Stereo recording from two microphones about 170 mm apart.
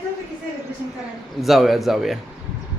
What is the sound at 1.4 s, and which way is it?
Speech, centre (ahead or behind).